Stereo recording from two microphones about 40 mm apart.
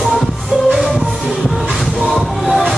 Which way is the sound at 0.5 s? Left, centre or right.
Centre.